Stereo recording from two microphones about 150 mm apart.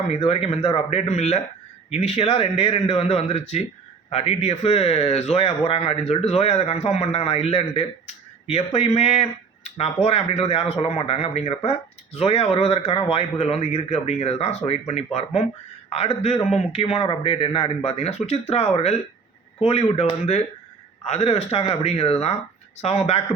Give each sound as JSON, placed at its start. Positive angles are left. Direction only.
{"t": 0.2, "sound": "a man's voice", "side_deg": 40}